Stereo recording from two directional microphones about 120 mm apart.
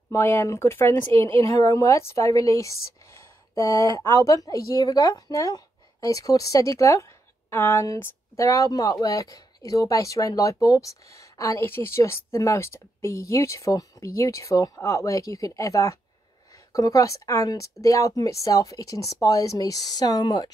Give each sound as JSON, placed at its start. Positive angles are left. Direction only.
{"t": 0.1, "sound": "speech", "side_deg": 20}